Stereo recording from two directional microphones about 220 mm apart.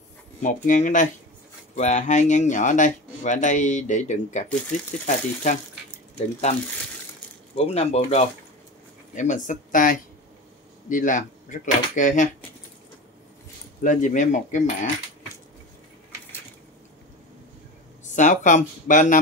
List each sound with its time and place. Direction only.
0.4 s speech: 35° left (ahead or behind)
7.5 s speech: 30° left (ahead or behind)
13.8 s speech: 35° left (ahead or behind)
18.1 s speech: 35° left (ahead or behind)